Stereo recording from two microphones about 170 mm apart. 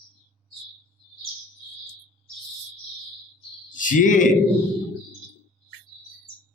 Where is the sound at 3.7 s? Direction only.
50° left (ahead or behind).